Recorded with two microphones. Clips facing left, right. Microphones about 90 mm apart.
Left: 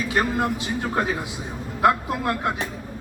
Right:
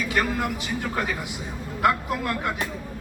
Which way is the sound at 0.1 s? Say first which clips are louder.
Left 3 dB; 30° left (ahead or behind).